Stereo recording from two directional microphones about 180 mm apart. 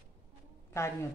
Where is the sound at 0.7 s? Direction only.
15° left (ahead or behind).